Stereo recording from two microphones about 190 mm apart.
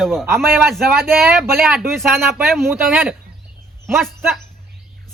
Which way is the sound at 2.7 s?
10° right (ahead or behind).